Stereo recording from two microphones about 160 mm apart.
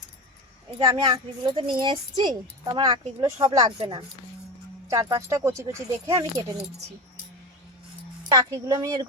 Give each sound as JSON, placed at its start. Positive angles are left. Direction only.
{"t": 0.8, "sound": "speech", "side_deg": -25}
{"t": 4.9, "sound": "speech", "side_deg": -20}
{"t": 8.3, "sound": "speech", "side_deg": -25}